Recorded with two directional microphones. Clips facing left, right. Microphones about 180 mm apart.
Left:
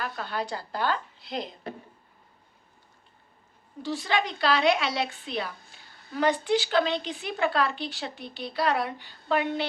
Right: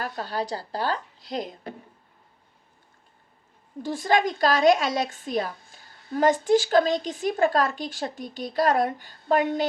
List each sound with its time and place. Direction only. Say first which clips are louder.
0.0 s speech: right 3 dB; 35° right (ahead or behind)
3.8 s speech: right 5 dB; 50° right (ahead or behind)